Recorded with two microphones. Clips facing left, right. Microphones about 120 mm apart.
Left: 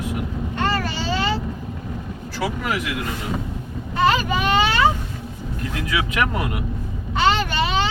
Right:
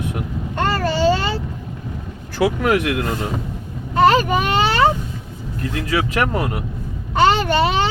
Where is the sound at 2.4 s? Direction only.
60° right (ahead or behind).